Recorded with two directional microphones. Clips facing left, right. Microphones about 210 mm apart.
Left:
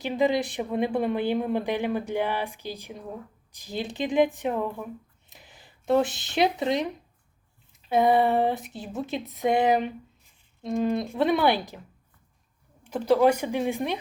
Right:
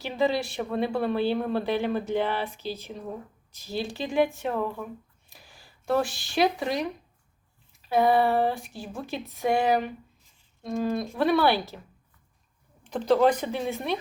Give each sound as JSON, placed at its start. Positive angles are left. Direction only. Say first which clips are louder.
{"t": 0.0, "sound": "speech", "louder": "left 2 dB", "side_deg": 15}
{"t": 12.8, "sound": "speech", "louder": "left 1 dB", "side_deg": 10}